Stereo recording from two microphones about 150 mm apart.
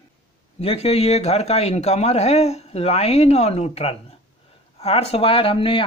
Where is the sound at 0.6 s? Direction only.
40° left (ahead or behind).